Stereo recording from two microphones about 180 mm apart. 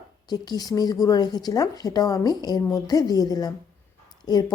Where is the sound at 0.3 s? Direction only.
20° left (ahead or behind).